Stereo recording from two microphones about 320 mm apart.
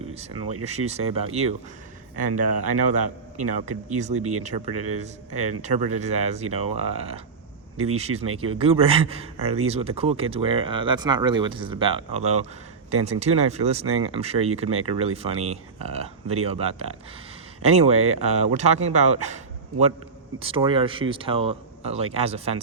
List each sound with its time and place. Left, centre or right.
0.1 s speech: centre
20.4 s speech: centre